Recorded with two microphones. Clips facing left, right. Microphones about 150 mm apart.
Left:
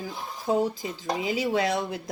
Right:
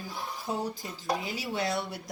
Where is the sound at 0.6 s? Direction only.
90° left.